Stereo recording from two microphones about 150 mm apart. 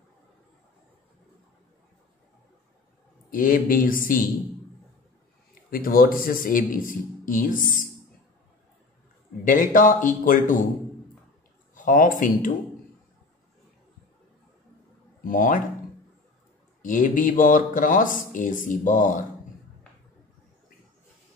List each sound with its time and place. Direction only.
3.3 s speech: 65° left (ahead or behind)
5.5 s speech: 70° left (ahead or behind)
9.4 s speech: 60° left (ahead or behind)
11.7 s speech: 60° left (ahead or behind)
15.2 s speech: 65° left (ahead or behind)
16.8 s speech: 60° left (ahead or behind)